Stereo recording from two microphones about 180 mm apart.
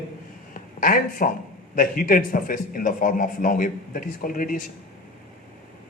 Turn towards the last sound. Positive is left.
turn(degrees=50)  # may be behind; listen again after turning